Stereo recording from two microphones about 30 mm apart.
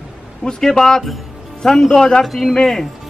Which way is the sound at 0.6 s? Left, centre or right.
Centre.